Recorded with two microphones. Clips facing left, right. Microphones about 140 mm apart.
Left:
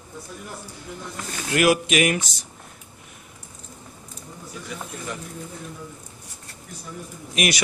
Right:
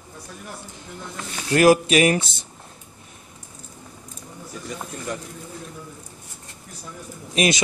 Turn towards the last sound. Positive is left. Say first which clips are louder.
# right 3 dB
turn(degrees=-25)  # may be behind; listen again after turning